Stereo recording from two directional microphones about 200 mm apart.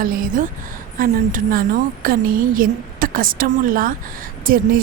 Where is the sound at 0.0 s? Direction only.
45° right (ahead or behind).